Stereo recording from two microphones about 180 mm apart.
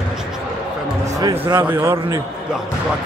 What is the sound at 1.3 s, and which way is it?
Speech, 25° right (ahead or behind).